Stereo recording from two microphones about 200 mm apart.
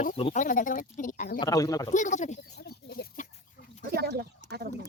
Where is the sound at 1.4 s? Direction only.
15° left (ahead or behind).